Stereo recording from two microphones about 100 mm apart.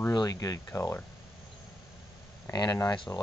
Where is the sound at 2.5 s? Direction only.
40° left (ahead or behind).